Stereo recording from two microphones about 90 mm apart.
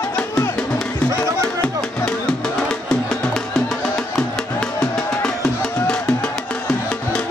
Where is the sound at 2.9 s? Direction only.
5° left (ahead or behind).